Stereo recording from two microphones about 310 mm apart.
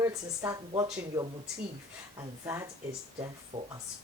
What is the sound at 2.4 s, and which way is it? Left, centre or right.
Speech, centre.